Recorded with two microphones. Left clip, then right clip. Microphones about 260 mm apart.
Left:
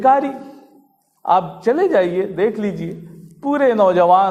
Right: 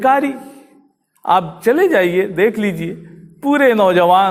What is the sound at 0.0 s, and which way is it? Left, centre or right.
A man's voice, right.